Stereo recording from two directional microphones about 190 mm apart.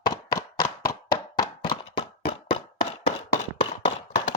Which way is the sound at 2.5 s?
25° left (ahead or behind).